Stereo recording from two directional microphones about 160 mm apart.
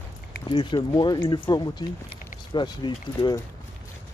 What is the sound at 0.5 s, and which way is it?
Speech, 30° left (ahead or behind).